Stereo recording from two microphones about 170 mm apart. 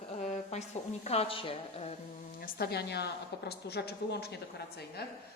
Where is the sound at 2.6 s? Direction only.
70° left (ahead or behind).